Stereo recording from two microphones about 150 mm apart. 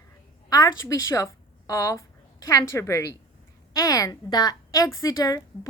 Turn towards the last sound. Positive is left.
turn(degrees=25)  # may be behind; listen again after turning